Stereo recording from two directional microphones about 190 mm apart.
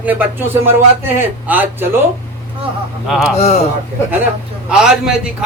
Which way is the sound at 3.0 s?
Centre (ahead or behind).